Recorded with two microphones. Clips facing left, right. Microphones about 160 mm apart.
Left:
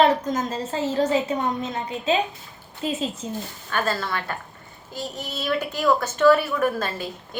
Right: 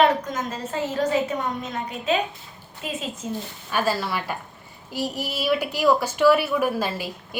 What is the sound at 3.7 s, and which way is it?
A woman's voice, 10° right (ahead or behind).